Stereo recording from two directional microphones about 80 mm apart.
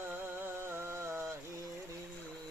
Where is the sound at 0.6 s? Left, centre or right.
Right.